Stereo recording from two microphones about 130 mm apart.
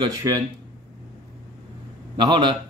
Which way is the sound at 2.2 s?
35° right (ahead or behind).